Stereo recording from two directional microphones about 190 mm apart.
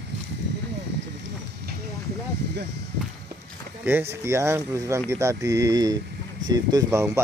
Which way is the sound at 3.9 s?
10° right (ahead or behind).